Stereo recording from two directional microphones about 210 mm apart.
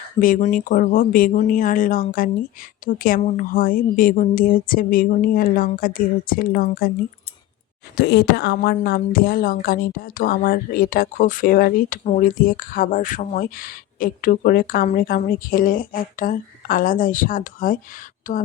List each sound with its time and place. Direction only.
0.2 s a woman's voice: 40° left (ahead or behind)
7.9 s a woman's voice: 50° left (ahead or behind)